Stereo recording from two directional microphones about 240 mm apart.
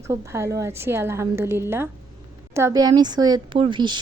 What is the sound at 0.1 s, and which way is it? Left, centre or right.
A woman's voice, centre.